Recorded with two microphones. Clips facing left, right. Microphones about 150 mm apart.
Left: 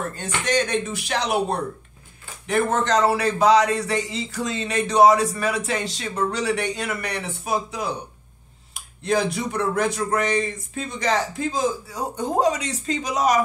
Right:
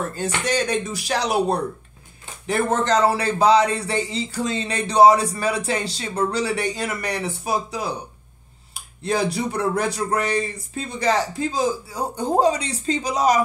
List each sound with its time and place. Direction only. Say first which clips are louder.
0.1 s speech: even; 35° right (ahead or behind)